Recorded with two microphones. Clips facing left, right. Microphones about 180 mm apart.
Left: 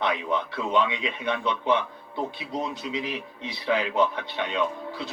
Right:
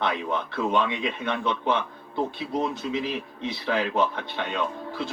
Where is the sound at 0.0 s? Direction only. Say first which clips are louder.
Left 1 dB; 15° left (ahead or behind).